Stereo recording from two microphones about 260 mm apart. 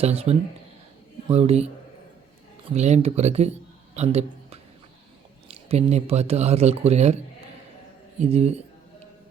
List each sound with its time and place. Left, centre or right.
0.0 s speech: right
3.9 s a sound: right
5.5 s speech: right
8.2 s speech: right